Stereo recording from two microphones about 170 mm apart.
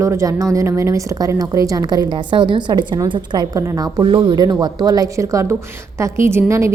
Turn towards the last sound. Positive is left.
turn(degrees=-15)  # may be behind; listen again after turning